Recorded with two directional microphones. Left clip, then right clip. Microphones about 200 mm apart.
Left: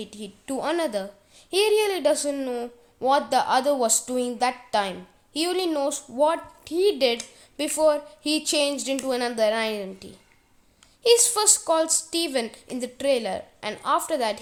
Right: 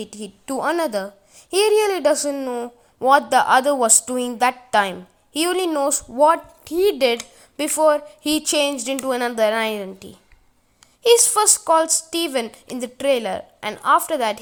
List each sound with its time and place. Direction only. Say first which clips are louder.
0.1 s a child's voice: right 4 dB; 15° right (ahead or behind)